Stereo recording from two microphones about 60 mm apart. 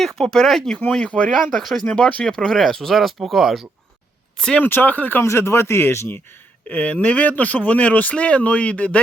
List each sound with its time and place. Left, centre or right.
0.2 s speech: centre
0.9 s speech: centre
1.3 s speech: centre
1.8 s speech: centre
4.4 s speech: centre
4.6 s speech: left
5.2 s speech: left
6.7 s speech: left